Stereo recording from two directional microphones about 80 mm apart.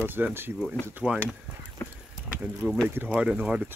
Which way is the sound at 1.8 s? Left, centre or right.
Left.